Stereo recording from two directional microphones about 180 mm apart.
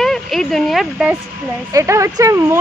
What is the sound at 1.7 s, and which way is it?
Speech, 15° right (ahead or behind).